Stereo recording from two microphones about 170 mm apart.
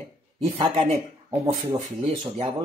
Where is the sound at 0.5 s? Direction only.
35° right (ahead or behind).